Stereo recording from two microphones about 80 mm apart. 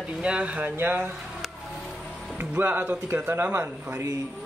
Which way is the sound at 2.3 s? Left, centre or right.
Right.